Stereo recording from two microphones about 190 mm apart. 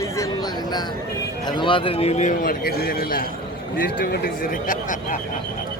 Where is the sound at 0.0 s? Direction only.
20° left (ahead or behind).